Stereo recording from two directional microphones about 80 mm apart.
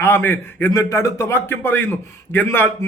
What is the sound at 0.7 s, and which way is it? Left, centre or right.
A man's voice, left.